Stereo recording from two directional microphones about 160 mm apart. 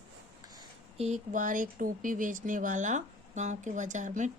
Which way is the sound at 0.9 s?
45° right (ahead or behind).